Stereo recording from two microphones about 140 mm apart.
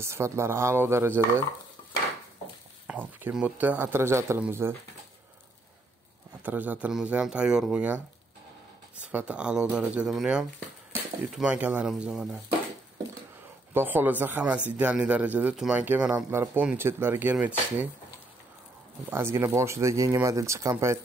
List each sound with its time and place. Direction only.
0.0 s speech: 20° right (ahead or behind)
2.9 s speech: 10° right (ahead or behind)
6.4 s speech: 10° right (ahead or behind)
13.7 s speech: 15° right (ahead or behind)
19.0 s speech: 15° right (ahead or behind)